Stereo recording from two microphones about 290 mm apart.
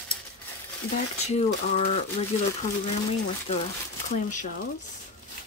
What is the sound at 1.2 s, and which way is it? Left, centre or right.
Speech, left.